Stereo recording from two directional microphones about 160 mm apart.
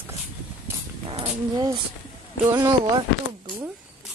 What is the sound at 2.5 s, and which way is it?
Speech, 25° right (ahead or behind).